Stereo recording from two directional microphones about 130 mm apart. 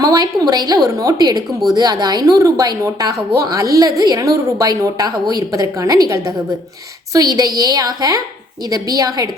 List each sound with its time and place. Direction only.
0.0 s a woman's voice: 30° right (ahead or behind)